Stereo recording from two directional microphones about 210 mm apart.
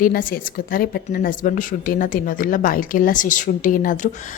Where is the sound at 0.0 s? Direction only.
40° left (ahead or behind).